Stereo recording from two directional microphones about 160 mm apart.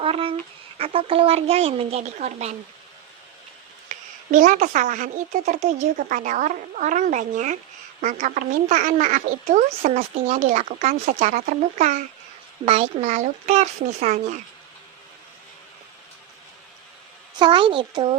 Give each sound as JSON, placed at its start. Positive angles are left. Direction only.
{"t": 0.0, "sound": "a sound", "side_deg": -35}
{"t": 0.8, "sound": "speech", "side_deg": -35}
{"t": 3.8, "sound": "a woman's voice", "side_deg": -55}
{"t": 12.6, "sound": "a woman's voice", "side_deg": -40}
{"t": 17.3, "sound": "speech", "side_deg": -30}